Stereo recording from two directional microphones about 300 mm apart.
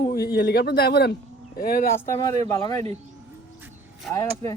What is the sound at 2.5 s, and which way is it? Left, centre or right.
Speech, centre.